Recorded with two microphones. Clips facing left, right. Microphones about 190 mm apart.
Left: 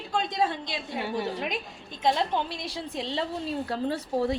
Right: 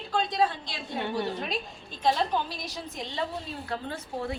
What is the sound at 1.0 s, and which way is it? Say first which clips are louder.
Speech: right 1 dB; 5° left (ahead or behind).